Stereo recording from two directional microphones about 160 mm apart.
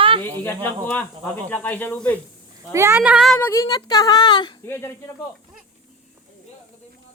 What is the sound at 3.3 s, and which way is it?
Speech, 15° left (ahead or behind).